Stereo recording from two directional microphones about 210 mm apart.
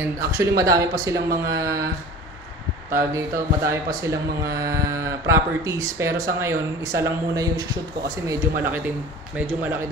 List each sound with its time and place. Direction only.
0.3 s speech: 15° right (ahead or behind)
2.9 s speech: 10° right (ahead or behind)